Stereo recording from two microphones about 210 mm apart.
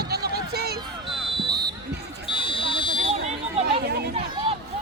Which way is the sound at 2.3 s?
25° left (ahead or behind).